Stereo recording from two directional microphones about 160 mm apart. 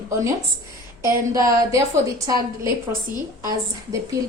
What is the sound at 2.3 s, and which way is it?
Speech, 20° right (ahead or behind).